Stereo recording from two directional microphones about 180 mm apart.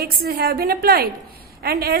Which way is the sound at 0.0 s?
60° right (ahead or behind).